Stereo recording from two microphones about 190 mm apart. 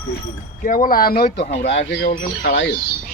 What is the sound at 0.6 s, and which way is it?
Speech, 45° left (ahead or behind).